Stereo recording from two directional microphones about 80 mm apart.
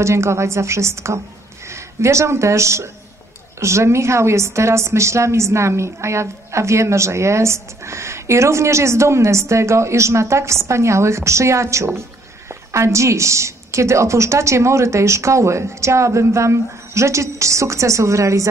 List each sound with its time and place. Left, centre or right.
0.0 s a woman's voice: right